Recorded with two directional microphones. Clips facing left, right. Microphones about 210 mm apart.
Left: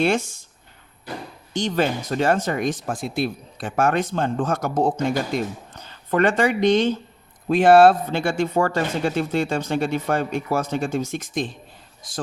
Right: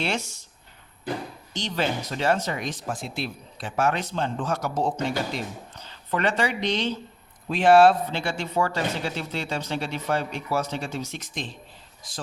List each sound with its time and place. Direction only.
0.0 s speech: 50° left (ahead or behind)
1.5 s speech: 50° left (ahead or behind)